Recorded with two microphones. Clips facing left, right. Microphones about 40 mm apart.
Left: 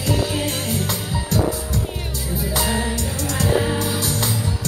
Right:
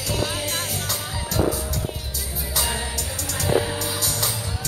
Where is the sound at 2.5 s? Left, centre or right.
Left.